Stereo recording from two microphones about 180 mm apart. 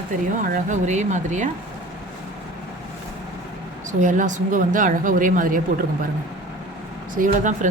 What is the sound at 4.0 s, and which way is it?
Speech, 45° right (ahead or behind).